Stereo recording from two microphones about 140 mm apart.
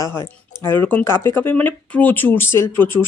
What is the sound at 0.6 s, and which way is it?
Speech, 15° left (ahead or behind).